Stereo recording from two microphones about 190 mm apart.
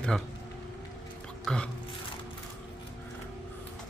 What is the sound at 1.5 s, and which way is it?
Speech, 5° left (ahead or behind).